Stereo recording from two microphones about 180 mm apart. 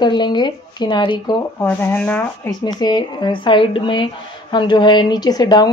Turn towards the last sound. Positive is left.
turn(degrees=25)  # may be behind; listen again after turning